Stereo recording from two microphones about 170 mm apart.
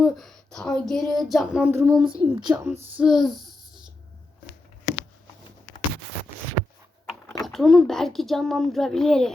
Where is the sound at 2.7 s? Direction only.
35° right (ahead or behind).